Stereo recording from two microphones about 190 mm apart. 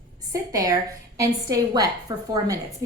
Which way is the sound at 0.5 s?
20° right (ahead or behind).